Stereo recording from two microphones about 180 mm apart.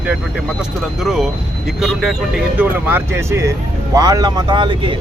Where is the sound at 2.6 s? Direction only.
15° right (ahead or behind).